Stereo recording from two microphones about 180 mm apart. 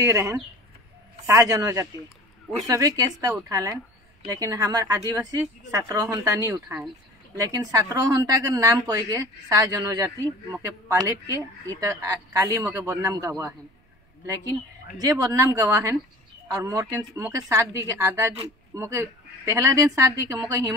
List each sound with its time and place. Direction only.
0.0 s speech: 15° right (ahead or behind)